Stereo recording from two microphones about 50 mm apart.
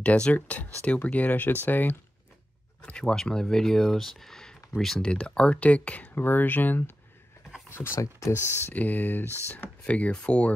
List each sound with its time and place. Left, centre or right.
0.0 s speech: left
2.8 s speech: centre
5.0 s speech: centre
6.1 s speech: left
7.7 s speech: left
8.7 s speech: left
9.8 s speech: left